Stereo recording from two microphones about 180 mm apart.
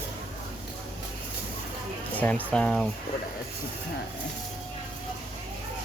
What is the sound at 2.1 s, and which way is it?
Speech, 10° left (ahead or behind).